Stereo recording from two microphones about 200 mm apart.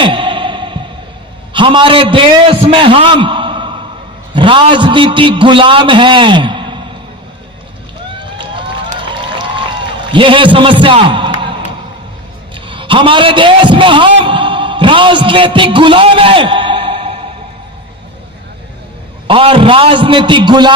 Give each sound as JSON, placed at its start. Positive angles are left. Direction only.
{"t": 0.0, "sound": "a sound", "side_deg": -25}
{"t": 1.5, "sound": "a man's voice", "side_deg": -25}
{"t": 8.2, "sound": "run", "side_deg": -25}
{"t": 9.0, "sound": "a sound", "side_deg": -25}
{"t": 10.1, "sound": "a man's voice", "side_deg": -25}
{"t": 12.5, "sound": "a man's voice", "side_deg": -25}
{"t": 19.3, "sound": "a man's voice", "side_deg": -25}